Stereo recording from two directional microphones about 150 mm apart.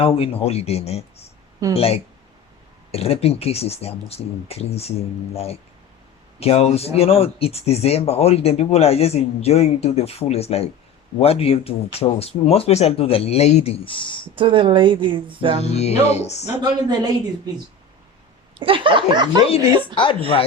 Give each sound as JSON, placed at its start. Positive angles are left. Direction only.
{"t": 0.0, "sound": "speech", "side_deg": 40}
{"t": 14.3, "sound": "speech", "side_deg": -35}
{"t": 15.6, "sound": "speech", "side_deg": 45}
{"t": 16.6, "sound": "a woman's voice", "side_deg": -25}
{"t": 18.5, "sound": "speech", "side_deg": -35}